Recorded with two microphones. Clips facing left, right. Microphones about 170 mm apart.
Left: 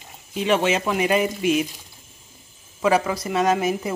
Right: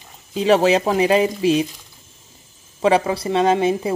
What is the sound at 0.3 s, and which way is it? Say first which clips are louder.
Speech: right 5 dB; 35° right (ahead or behind).